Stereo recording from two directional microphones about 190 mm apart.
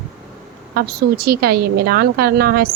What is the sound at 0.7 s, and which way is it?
A woman's voice, 55° right (ahead or behind).